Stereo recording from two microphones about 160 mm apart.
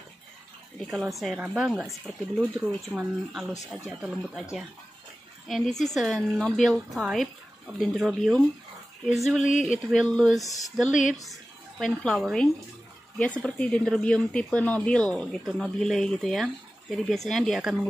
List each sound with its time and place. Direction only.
0.8 s speech: centre (ahead or behind)
9.4 s speech: 50° left (ahead or behind)
9.7 s speech: 5° right (ahead or behind)
10.4 s speech: 20° left (ahead or behind)
10.9 s speech: 50° left (ahead or behind)
11.8 s speech: centre (ahead or behind)